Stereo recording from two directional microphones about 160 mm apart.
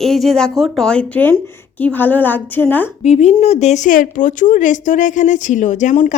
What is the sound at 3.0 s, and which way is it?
Speech, 40° left (ahead or behind).